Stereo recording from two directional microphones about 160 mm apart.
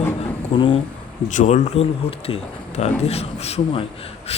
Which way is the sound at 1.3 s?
50° left (ahead or behind).